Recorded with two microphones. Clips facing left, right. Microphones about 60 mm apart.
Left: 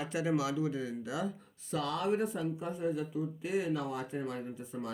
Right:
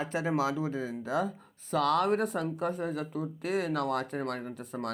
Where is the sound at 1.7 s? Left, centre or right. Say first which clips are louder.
Right 6 dB; right.